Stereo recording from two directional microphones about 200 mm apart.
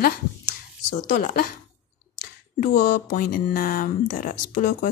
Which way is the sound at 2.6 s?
50° left (ahead or behind).